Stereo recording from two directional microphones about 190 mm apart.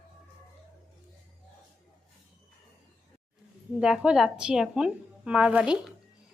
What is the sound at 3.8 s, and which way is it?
Speech, 5° right (ahead or behind).